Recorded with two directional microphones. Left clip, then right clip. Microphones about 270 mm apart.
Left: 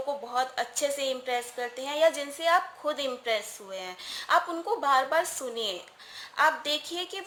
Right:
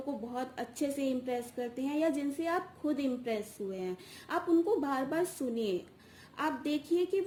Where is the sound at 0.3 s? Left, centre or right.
Centre.